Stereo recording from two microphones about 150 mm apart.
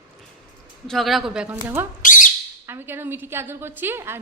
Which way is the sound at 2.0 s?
60° left (ahead or behind).